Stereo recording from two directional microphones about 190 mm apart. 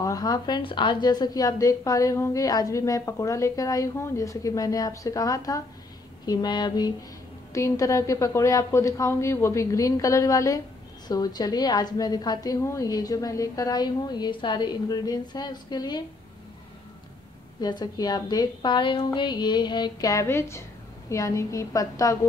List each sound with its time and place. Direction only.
0.0 s a woman's voice: 20° left (ahead or behind)
17.6 s a woman's voice: 20° left (ahead or behind)